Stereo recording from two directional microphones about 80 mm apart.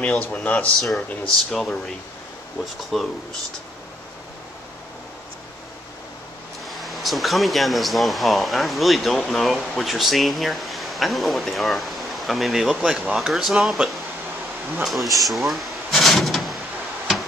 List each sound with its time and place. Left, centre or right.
0.2 s speech: centre
1.5 s speech: centre
6.7 s speech: centre
14.8 s a sound: centre